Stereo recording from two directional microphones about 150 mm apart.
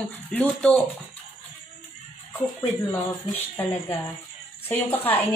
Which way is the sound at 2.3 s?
20° left (ahead or behind).